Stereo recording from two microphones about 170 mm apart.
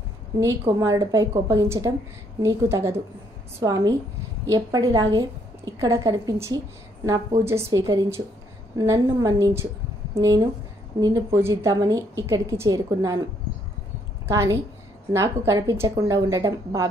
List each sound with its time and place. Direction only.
0.4 s a woman's voice: 20° right (ahead or behind)
14.2 s a woman's voice: 20° right (ahead or behind)